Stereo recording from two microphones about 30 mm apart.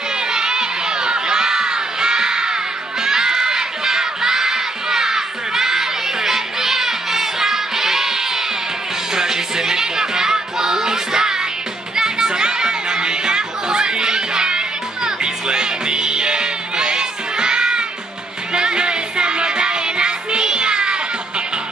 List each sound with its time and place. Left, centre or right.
0.3 s crowd: right
9.1 s music: centre
11.9 s children playing: right
15.0 s music: right